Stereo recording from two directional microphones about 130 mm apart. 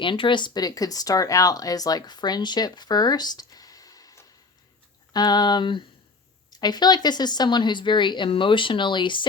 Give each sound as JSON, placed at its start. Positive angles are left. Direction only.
{"t": 0.0, "sound": "a woman's voice", "side_deg": 40}